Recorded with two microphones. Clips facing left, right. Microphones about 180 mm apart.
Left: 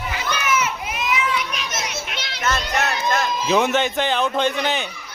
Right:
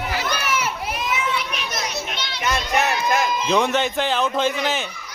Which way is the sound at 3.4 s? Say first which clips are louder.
Left 4 dB; 5° left (ahead or behind).